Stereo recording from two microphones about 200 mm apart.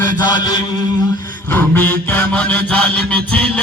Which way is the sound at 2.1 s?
10° left (ahead or behind).